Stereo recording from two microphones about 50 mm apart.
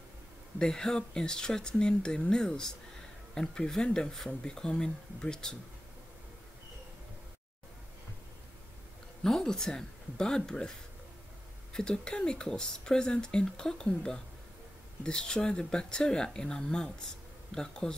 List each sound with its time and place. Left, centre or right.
0.6 s speech: centre
9.2 s speech: centre
11.7 s speech: centre